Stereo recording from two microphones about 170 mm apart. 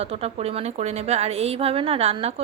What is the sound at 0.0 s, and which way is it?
A woman's voice, 40° right (ahead or behind).